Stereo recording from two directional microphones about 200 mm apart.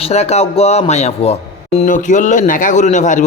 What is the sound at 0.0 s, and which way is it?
Speech, 30° left (ahead or behind).